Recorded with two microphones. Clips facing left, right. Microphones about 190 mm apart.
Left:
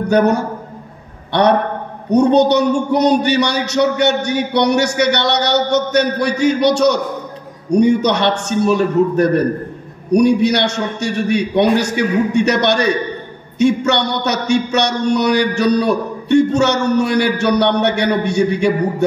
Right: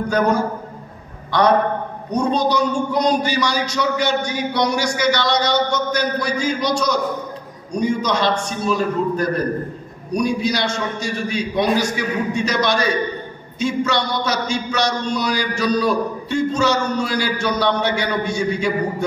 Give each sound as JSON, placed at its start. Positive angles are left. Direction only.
{"t": 0.1, "sound": "a man's voice", "side_deg": 70}